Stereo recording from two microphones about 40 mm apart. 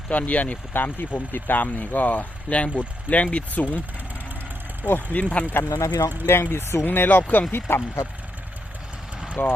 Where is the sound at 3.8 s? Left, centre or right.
Right.